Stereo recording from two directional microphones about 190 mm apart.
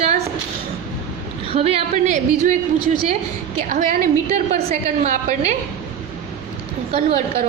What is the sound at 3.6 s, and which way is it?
A woman's voice, 45° right (ahead or behind).